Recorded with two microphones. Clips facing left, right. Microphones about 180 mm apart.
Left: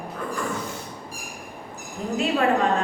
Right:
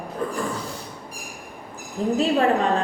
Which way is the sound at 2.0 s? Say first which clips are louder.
Right 6 dB; 35° right (ahead or behind).